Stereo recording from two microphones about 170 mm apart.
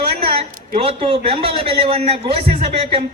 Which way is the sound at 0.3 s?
35° right (ahead or behind).